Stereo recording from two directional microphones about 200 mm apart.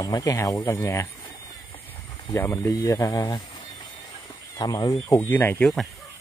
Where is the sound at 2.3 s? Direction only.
10° left (ahead or behind).